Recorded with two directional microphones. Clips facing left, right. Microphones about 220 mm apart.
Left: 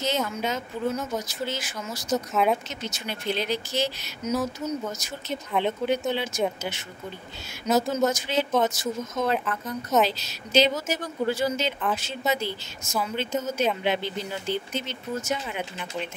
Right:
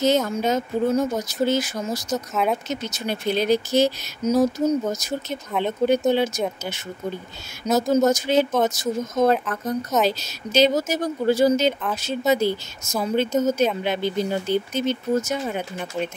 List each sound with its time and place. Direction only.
0.0 s speech: 45° right (ahead or behind)
2.1 s speech: centre (ahead or behind)
2.7 s speech: 40° right (ahead or behind)
7.7 s speech: 40° right (ahead or behind)